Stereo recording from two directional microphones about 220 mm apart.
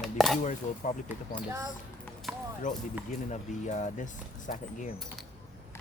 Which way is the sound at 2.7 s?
35° left (ahead or behind).